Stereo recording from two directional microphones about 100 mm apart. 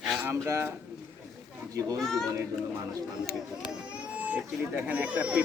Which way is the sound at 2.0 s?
5° left (ahead or behind).